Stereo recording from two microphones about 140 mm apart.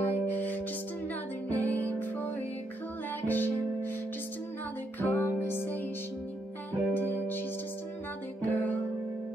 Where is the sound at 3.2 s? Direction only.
15° left (ahead or behind).